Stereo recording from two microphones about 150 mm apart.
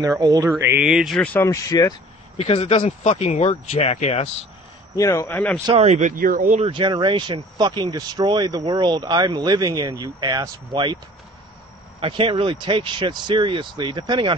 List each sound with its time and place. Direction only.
0.0 s speech: 25° right (ahead or behind)
0.7 s speech: 5° right (ahead or behind); by 2.0 s 25° left (ahead or behind)
2.3 s speech: 40° left (ahead or behind)
4.9 s speech: 20° left (ahead or behind)
5.3 s speech: 5° left (ahead or behind)
5.7 s speech: 45° right (ahead or behind)
6.7 s speech: 30° right (ahead or behind)
12.0 s speech: 35° right (ahead or behind)